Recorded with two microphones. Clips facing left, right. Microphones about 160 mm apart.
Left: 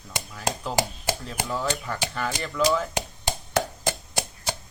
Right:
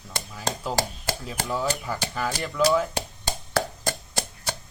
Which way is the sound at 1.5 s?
5° right (ahead or behind).